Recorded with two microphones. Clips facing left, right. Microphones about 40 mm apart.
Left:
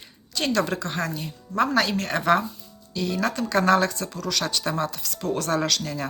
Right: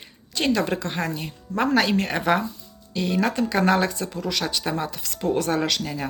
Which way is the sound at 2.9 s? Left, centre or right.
Right.